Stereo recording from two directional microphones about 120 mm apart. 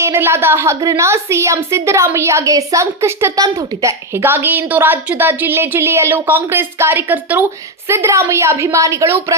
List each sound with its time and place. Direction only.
0.0 s a woman's voice: 20° right (ahead or behind)